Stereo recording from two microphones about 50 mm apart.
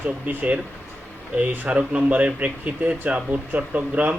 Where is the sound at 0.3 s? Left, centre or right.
Right.